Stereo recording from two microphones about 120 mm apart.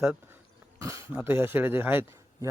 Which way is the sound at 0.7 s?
25° right (ahead or behind).